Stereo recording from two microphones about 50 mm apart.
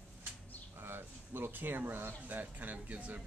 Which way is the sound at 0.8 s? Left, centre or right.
Right.